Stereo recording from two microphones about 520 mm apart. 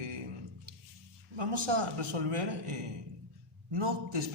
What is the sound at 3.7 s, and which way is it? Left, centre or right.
Speech, right.